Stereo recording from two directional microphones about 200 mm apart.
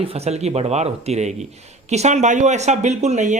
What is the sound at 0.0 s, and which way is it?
Speech, 30° right (ahead or behind).